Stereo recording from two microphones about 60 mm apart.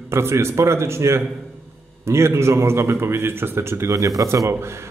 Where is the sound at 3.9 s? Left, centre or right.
Right.